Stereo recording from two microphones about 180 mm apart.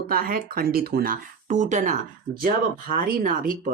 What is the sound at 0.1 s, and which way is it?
Speech, 55° right (ahead or behind).